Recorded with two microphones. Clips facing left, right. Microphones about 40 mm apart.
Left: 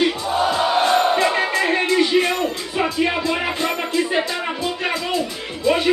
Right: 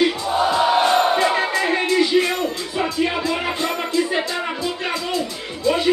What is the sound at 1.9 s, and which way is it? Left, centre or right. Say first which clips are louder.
Music: even; left.